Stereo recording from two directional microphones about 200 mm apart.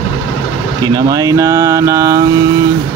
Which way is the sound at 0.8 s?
15° right (ahead or behind).